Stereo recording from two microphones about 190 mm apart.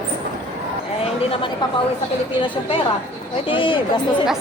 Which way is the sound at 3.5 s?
25° left (ahead or behind).